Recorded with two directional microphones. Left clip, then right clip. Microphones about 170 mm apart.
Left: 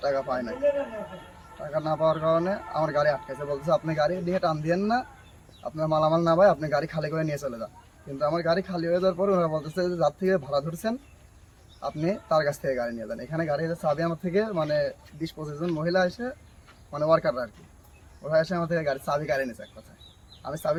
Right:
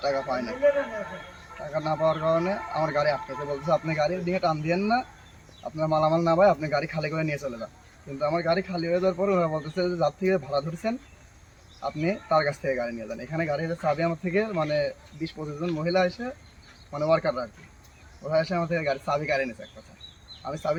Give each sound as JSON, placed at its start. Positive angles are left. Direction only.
{"t": 0.0, "sound": "speech", "side_deg": 20}
{"t": 1.7, "sound": "speech", "side_deg": 15}